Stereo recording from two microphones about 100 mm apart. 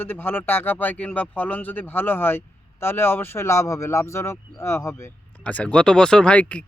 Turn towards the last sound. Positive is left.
turn(degrees=15)  # may be behind; listen again after turning